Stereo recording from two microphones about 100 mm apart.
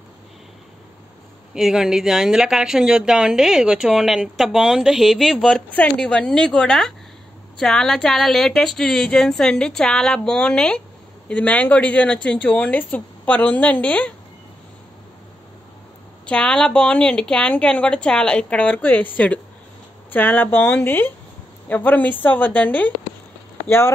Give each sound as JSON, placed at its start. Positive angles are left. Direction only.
{"t": 1.5, "sound": "speech", "side_deg": -5}
{"t": 5.5, "sound": "speech", "side_deg": 15}
{"t": 16.3, "sound": "speech", "side_deg": 10}